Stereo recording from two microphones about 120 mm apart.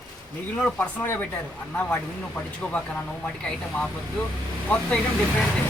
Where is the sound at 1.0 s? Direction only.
15° left (ahead or behind).